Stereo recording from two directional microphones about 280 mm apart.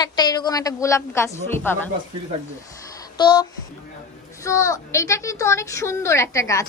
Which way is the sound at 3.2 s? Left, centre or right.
Centre.